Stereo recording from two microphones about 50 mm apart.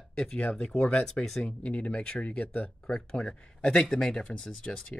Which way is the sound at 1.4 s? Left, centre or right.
Left.